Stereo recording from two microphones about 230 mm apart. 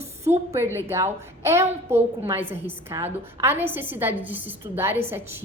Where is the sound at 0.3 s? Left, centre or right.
Centre.